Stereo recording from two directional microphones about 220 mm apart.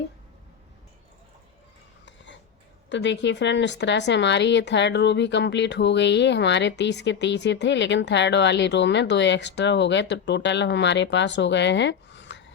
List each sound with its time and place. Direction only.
2.9 s a woman's voice: 55° left (ahead or behind)